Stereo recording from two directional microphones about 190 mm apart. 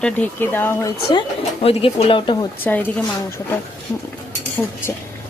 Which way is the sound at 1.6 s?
30° left (ahead or behind).